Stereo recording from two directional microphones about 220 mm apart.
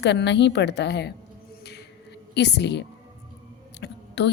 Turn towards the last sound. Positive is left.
turn(degrees=50)  # may be behind; listen again after turning